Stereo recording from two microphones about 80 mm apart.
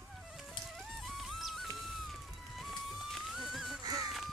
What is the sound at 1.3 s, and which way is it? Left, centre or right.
Music, centre.